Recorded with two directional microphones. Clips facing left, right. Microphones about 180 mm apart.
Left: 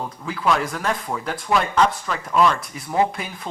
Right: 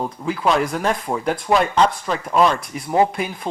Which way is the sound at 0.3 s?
25° right (ahead or behind).